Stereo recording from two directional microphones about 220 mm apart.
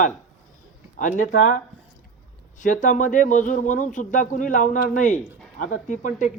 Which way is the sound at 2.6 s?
35° left (ahead or behind).